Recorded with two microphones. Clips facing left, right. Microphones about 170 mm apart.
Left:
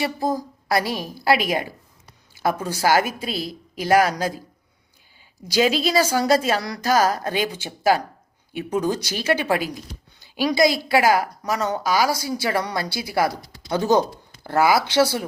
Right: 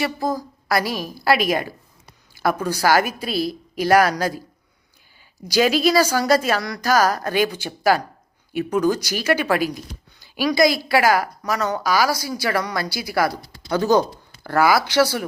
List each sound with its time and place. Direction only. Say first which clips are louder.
0.0 s speech: even; 30° left (ahead or behind)
5.5 s speech: right 2 dB; 25° left (ahead or behind)